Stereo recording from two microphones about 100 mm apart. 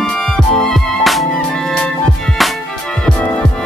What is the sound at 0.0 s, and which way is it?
Music, 5° left (ahead or behind).